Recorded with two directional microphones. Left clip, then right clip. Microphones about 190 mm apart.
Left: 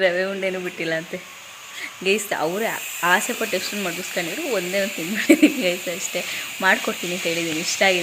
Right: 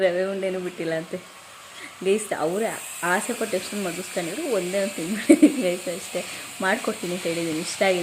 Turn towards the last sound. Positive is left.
turn(degrees=-10)  # may be behind; listen again after turning